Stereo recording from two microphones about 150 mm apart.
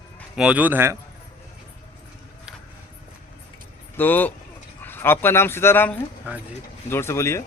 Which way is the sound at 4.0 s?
10° left (ahead or behind).